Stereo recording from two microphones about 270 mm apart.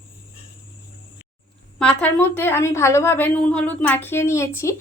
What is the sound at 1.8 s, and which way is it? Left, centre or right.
A woman's voice, centre.